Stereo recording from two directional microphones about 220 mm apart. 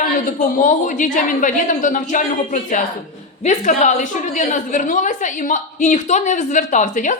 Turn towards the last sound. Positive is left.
turn(degrees=35)  # may be behind; listen again after turning